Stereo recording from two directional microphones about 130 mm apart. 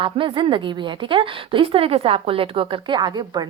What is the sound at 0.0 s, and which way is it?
A woman's voice, 40° right (ahead or behind).